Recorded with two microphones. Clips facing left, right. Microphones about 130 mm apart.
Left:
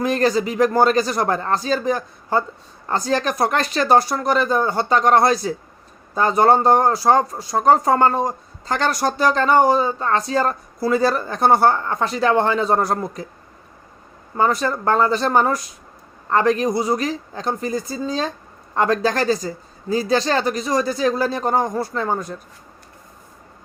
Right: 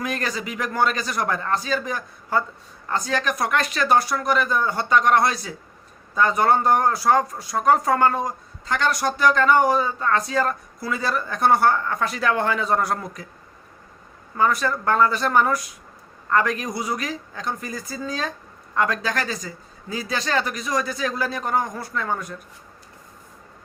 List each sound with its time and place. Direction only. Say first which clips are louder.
0.0 s a woman's voice: left 9 dB; 30° left (ahead or behind)
14.3 s a woman's voice: left 2 dB; 30° left (ahead or behind)